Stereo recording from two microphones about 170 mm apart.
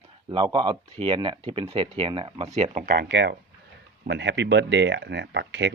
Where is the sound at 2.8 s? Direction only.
80° right.